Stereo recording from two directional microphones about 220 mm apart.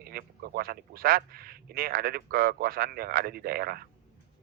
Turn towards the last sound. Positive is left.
turn(degrees=-45)  # may be behind; listen again after turning